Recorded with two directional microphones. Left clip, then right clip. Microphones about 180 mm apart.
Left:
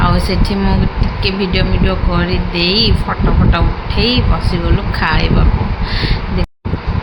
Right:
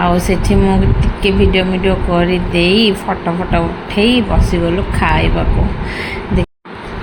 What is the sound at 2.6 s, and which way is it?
Speech, 55° right (ahead or behind).